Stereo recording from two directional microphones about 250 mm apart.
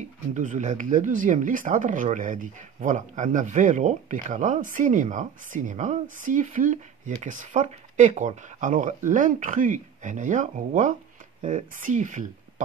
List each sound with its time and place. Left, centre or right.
0.3 s speech: right